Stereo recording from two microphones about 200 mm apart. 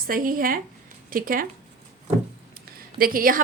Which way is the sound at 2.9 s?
45° right (ahead or behind).